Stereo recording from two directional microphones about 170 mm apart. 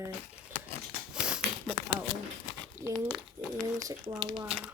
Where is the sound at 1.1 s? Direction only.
5° right (ahead or behind).